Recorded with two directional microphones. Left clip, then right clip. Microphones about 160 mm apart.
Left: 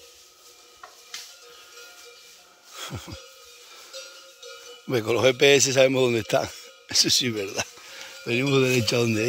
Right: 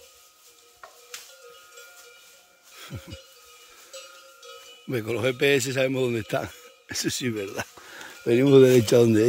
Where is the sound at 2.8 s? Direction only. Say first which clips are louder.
Left 5 dB; 10° right (ahead or behind).